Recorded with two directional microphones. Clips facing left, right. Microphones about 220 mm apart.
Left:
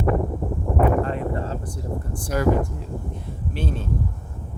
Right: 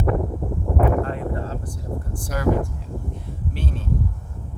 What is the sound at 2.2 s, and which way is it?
Speech, 20° left (ahead or behind).